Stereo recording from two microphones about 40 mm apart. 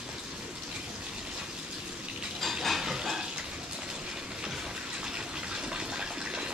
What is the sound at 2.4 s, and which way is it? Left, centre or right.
Stir, centre.